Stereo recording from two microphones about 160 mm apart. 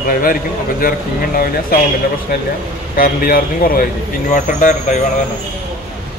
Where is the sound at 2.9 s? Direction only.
65° left (ahead or behind).